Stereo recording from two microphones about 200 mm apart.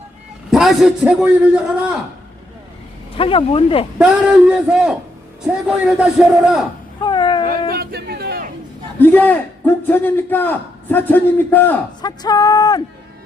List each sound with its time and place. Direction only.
0.5 s a man's voice: centre (ahead or behind)
3.2 s speech: 25° left (ahead or behind)
3.9 s a man's voice: 5° right (ahead or behind)
7.0 s a sound: 25° left (ahead or behind)
7.7 s a sound: 50° right (ahead or behind)
9.0 s a man's voice: 10° left (ahead or behind)
12.0 s speech: 20° left (ahead or behind)